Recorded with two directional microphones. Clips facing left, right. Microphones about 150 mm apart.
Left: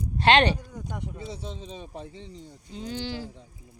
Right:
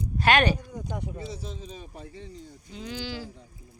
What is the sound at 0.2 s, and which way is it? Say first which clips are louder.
Speech: left 2 dB; 30° left (ahead or behind).